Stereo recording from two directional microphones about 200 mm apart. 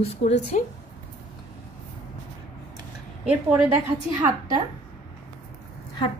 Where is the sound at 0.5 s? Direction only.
40° left (ahead or behind).